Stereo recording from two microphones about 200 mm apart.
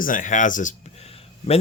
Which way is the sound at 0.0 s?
40° left (ahead or behind).